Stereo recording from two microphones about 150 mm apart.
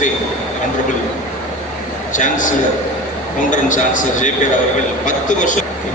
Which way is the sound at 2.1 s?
60° left (ahead or behind).